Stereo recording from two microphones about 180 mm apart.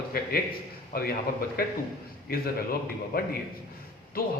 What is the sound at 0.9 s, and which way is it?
A man's voice, 60° left (ahead or behind).